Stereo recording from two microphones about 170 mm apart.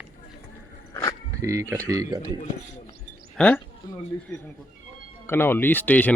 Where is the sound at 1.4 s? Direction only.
15° right (ahead or behind).